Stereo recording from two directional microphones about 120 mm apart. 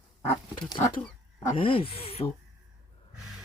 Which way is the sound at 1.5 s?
50° left (ahead or behind).